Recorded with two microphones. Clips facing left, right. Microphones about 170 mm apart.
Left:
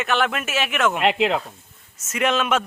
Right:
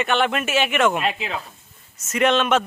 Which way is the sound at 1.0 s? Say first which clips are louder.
Left 6 dB; 75° left (ahead or behind).